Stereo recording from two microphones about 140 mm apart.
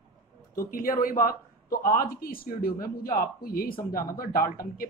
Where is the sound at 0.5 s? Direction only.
90° left.